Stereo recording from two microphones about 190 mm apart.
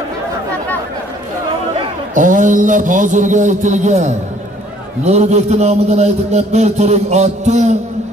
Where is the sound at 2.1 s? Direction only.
45° right (ahead or behind).